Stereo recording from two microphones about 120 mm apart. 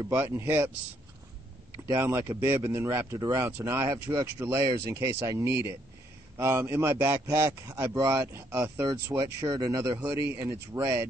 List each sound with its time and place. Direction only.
0.1 s speech: 20° right (ahead or behind)
1.9 s speech: 25° right (ahead or behind)
9.1 s speech: 35° right (ahead or behind)